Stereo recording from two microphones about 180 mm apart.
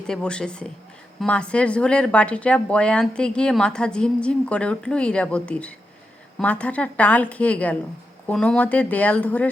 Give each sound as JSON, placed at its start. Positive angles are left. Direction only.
{"t": 0.1, "sound": "a woman's voice", "side_deg": 5}